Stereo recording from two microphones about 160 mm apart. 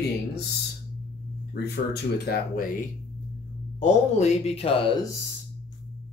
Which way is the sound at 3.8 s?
45° left (ahead or behind).